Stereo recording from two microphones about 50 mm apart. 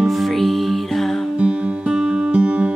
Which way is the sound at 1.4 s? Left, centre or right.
Right.